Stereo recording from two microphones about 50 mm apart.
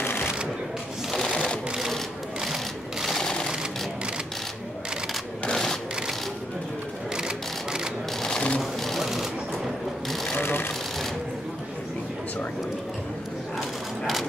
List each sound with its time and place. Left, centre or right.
0.0 s shuffling cards: left
1.3 s sewing machine: centre
2.4 s sewing machine: centre
3.2 s sewing machine: centre
5.4 s a sound: centre
7.2 s sewing machine: centre
8.2 s sewing machine: centre
10.3 s sewing machine: left